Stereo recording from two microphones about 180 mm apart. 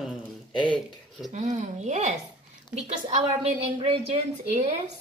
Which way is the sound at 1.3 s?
40° right (ahead or behind).